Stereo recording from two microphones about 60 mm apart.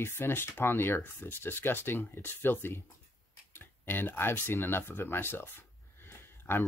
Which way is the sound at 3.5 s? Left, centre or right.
Left.